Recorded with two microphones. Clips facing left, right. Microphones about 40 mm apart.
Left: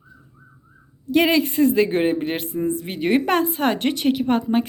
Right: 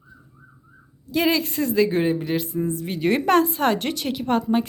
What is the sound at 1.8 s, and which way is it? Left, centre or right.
Speech, left.